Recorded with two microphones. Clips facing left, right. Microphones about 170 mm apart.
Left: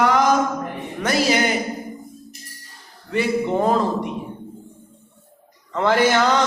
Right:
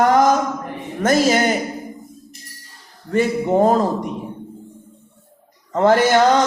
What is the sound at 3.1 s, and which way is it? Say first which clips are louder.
Speech: right 3 dB; 45° right (ahead or behind).